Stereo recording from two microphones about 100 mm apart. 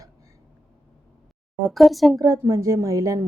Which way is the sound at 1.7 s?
Centre (ahead or behind).